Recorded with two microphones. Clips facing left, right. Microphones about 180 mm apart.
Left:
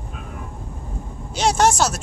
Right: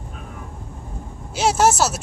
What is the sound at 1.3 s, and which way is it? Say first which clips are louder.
Music: even; 5° right (ahead or behind).